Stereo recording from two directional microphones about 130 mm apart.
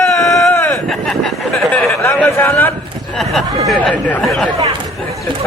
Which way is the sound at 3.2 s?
Centre (ahead or behind).